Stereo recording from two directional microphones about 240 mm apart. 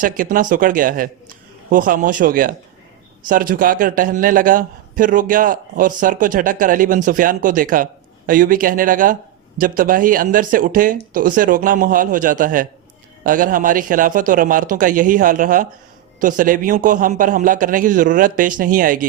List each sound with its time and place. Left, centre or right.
0.0 s a man's voice: right